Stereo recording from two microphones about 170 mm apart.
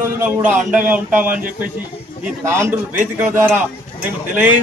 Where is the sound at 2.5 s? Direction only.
15° right (ahead or behind).